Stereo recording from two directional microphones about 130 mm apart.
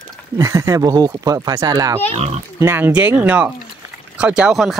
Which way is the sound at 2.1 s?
55° right (ahead or behind).